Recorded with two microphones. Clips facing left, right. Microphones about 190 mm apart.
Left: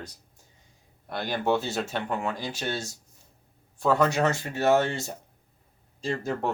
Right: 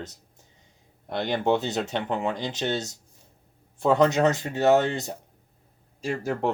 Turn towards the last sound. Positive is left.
turn(degrees=-10)  # may be behind; listen again after turning